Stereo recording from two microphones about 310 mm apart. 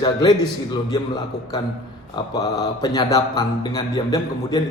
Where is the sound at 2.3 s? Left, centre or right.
Centre.